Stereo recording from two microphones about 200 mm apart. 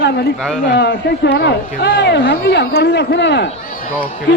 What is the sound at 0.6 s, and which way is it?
A man's voice, 55° left (ahead or behind).